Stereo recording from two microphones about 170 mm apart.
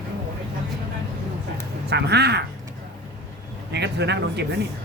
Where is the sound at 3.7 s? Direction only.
90° right.